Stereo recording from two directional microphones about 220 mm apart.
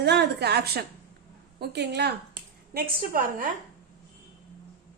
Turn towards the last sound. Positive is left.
turn(degrees=-40)  # may be behind; listen again after turning